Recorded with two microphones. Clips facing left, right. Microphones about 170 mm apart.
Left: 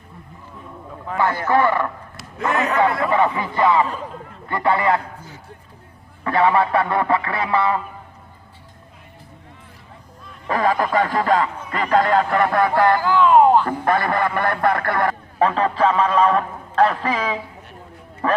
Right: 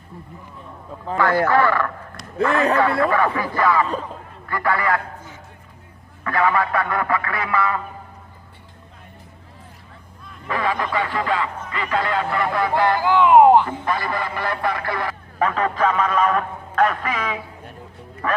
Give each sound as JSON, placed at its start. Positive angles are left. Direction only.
{"t": 1.1, "sound": "a man's voice", "side_deg": -30}
{"t": 1.5, "sound": "speech", "side_deg": 20}
{"t": 3.1, "sound": "a man's voice", "side_deg": 20}
{"t": 10.4, "sound": "a man's voice", "side_deg": 40}
{"t": 13.0, "sound": "speech", "side_deg": -15}
{"t": 13.7, "sound": "a man's voice", "side_deg": 55}
{"t": 15.4, "sound": "speech", "side_deg": 30}